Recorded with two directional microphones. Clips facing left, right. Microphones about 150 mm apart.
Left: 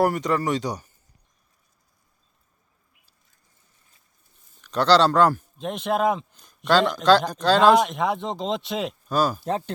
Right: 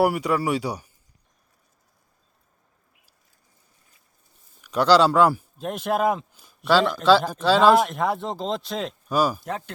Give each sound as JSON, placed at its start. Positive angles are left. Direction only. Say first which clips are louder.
{"t": 0.0, "sound": "speech", "louder": "right 1 dB", "side_deg": -10}
{"t": 4.6, "sound": "speech", "louder": "right 1 dB", "side_deg": -10}
{"t": 9.0, "sound": "speech", "louder": "right 1 dB", "side_deg": -10}
{"t": 9.4, "sound": "speech", "louder": "left 5 dB", "side_deg": 30}